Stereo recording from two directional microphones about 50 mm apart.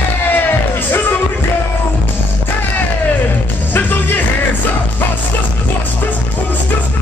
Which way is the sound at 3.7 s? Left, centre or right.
Left.